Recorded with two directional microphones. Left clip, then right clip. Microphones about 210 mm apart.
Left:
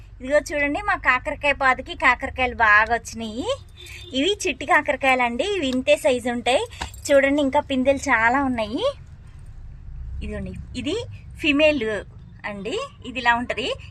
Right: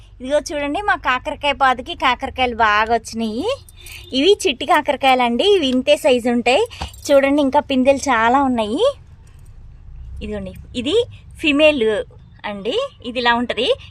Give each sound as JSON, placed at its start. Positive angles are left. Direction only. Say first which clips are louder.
{"t": 0.3, "sound": "a woman's voice", "louder": "right 1 dB", "side_deg": -35}
{"t": 10.2, "sound": "a woman's voice", "louder": "right 6 dB", "side_deg": -40}